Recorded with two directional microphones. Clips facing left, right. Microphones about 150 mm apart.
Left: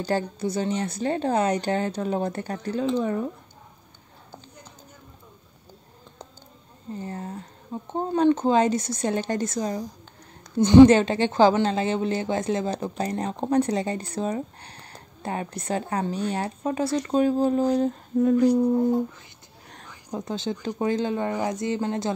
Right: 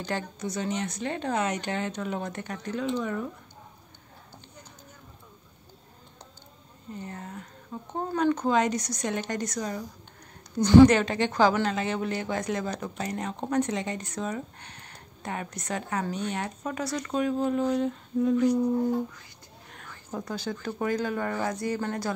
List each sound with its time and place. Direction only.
0.0 s a woman's voice: 30° left (ahead or behind)
6.9 s a woman's voice: 30° left (ahead or behind)
19.9 s speech: 15° left (ahead or behind)